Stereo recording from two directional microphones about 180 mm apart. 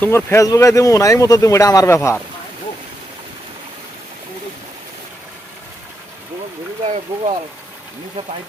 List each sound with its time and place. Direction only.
0.0 s speech: 15° left (ahead or behind)
6.8 s speech: 35° right (ahead or behind)